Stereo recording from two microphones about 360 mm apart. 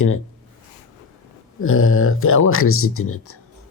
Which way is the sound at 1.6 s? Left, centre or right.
Left.